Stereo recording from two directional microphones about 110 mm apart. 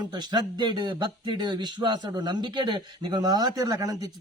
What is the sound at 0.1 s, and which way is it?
Speech, 40° right (ahead or behind).